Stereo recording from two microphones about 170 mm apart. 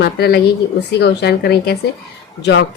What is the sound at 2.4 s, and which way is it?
Speech, 90° left.